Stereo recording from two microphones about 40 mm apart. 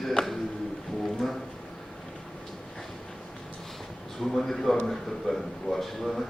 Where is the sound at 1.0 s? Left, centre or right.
Centre.